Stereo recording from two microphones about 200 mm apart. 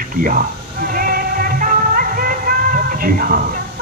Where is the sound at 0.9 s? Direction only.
45° right (ahead or behind).